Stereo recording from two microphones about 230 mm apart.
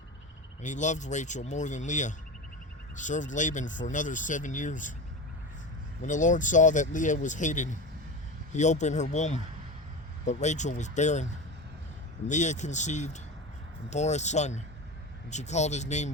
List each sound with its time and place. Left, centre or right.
0.6 s speech: left
6.0 s speech: left
12.3 s speech: left